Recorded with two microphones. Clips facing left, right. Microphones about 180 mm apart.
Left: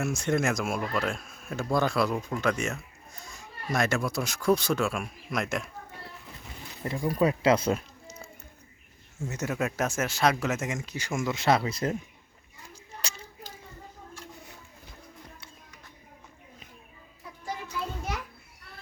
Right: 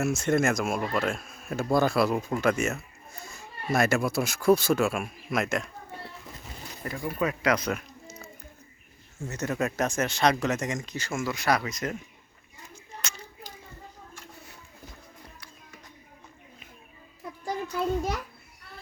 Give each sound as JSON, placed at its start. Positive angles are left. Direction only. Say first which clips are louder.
{"t": 0.0, "sound": "speech", "louder": "right 3 dB", "side_deg": -5}
{"t": 6.8, "sound": "speech", "louder": "left 4 dB", "side_deg": 25}
{"t": 9.2, "sound": "speech", "louder": "right 1 dB", "side_deg": 10}
{"t": 12.7, "sound": "a sound", "louder": "even", "side_deg": 35}